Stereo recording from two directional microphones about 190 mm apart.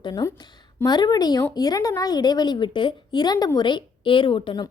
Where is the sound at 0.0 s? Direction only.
20° left (ahead or behind).